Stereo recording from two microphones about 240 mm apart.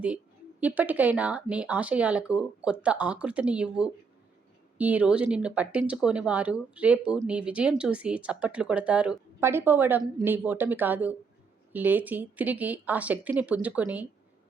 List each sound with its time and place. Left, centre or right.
0.6 s speech: centre